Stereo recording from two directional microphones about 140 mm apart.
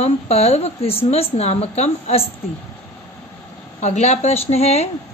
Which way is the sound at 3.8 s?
50° left (ahead or behind).